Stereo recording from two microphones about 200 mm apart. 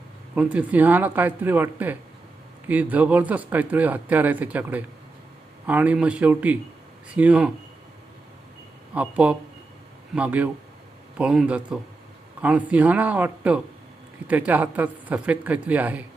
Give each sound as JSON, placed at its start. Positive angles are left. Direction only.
{"t": 0.3, "sound": "speech", "side_deg": -5}
{"t": 8.9, "sound": "a man's voice", "side_deg": -5}